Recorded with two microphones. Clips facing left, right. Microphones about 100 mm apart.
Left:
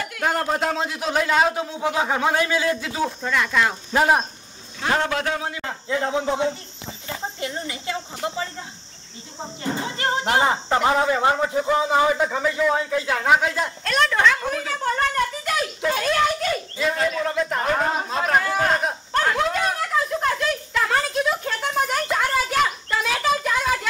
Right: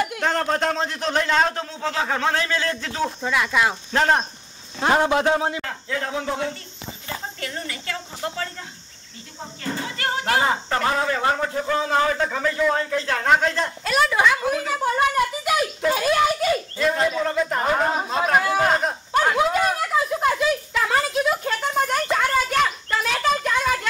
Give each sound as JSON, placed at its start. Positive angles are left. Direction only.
{"t": 0.2, "sound": "speech", "side_deg": 5}
{"t": 3.2, "sound": "speech", "side_deg": -5}
{"t": 3.9, "sound": "speech", "side_deg": 10}
{"t": 4.9, "sound": "a man's voice", "side_deg": -20}
{"t": 5.6, "sound": "speech", "side_deg": 20}
{"t": 9.6, "sound": "speech", "side_deg": 20}
{"t": 13.8, "sound": "a woman's voice", "side_deg": -5}
{"t": 19.1, "sound": "a sound", "side_deg": -5}